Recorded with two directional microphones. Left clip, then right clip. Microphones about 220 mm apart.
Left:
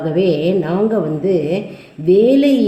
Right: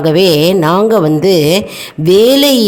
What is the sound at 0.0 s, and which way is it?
A woman's voice, 50° right (ahead or behind).